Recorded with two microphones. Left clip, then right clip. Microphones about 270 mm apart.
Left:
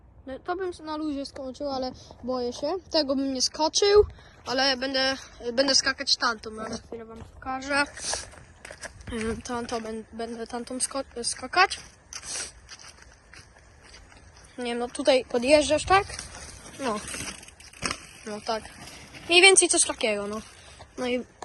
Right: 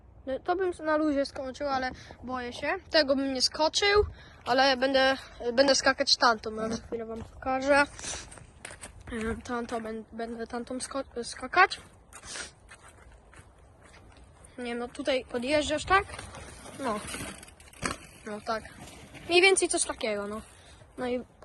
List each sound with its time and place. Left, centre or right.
0.3 s speech: centre
14.5 s speech: centre
16.1 s a sound: right
16.8 s speech: centre
17.7 s a sound: centre
21.0 s speech: centre